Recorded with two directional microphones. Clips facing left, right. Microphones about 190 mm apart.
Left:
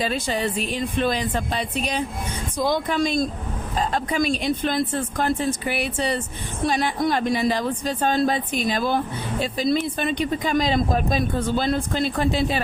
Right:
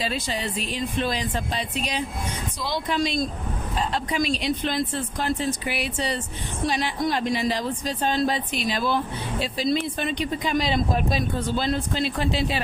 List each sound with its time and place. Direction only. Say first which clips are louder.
0.0 s speech: left 4 dB; 50° left (ahead or behind)